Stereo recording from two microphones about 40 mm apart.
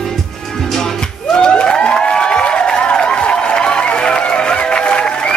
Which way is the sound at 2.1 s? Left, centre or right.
Left.